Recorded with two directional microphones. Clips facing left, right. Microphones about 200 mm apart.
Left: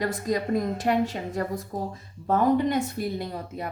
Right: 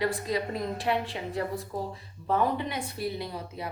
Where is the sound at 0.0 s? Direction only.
45° left (ahead or behind).